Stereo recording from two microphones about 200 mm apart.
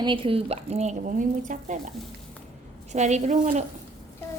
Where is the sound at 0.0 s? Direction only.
25° right (ahead or behind).